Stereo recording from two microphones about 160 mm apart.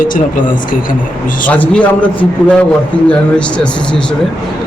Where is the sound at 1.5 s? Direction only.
10° left (ahead or behind).